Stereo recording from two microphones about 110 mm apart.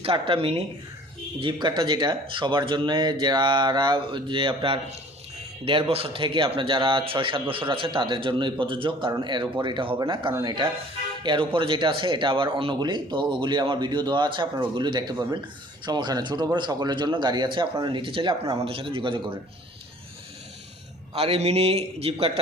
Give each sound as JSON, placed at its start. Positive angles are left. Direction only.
{"t": 0.0, "sound": "speech", "side_deg": -55}
{"t": 1.4, "sound": "speech", "side_deg": -45}
{"t": 21.2, "sound": "speech", "side_deg": -65}